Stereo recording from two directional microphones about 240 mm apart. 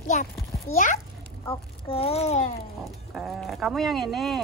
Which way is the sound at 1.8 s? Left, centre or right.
Left.